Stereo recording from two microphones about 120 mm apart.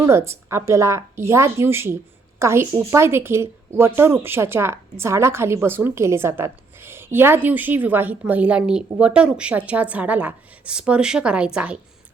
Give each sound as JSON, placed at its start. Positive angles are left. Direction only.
{"t": 0.0, "sound": "a woman's voice", "side_deg": -20}